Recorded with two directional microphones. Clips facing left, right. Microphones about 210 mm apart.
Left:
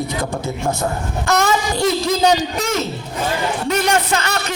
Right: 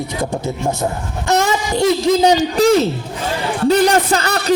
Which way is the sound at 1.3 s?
20° right (ahead or behind).